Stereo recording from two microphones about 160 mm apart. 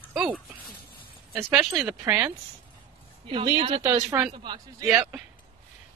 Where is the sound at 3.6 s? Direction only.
35° right (ahead or behind).